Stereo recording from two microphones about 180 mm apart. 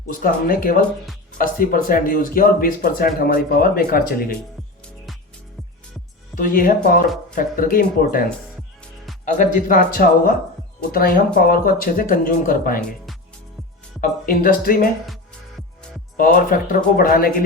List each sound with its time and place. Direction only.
0.1 s speech: 50° left (ahead or behind)
6.3 s speech: 50° left (ahead or behind)
9.2 s speech: 45° left (ahead or behind)
14.0 s speech: 55° left (ahead or behind)
16.1 s speech: 50° left (ahead or behind)